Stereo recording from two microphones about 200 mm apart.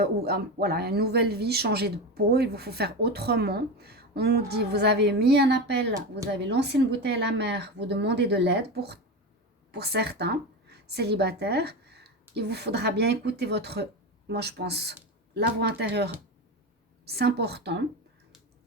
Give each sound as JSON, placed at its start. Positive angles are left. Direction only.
{"t": 0.0, "sound": "a woman's voice", "side_deg": -50}